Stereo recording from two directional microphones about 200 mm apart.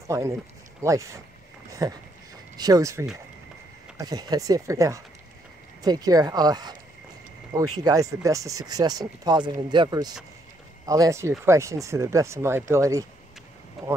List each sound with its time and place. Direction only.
0.8 s speech: 15° right (ahead or behind)
7.8 s speech: 15° right (ahead or behind)
13.8 s speech: centre (ahead or behind)